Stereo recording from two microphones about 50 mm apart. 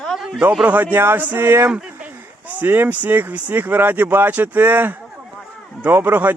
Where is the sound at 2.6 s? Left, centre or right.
Right.